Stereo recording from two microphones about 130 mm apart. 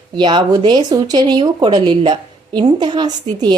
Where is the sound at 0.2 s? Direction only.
35° right (ahead or behind).